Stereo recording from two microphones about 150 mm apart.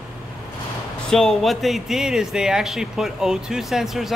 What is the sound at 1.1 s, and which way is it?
Speech, centre (ahead or behind).